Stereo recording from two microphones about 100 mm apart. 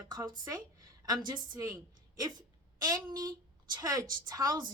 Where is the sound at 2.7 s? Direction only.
40° right (ahead or behind).